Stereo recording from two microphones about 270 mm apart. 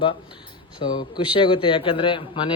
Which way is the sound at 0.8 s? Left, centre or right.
Centre.